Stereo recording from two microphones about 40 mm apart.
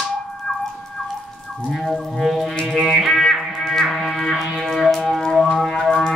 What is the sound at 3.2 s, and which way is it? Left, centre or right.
Music, centre.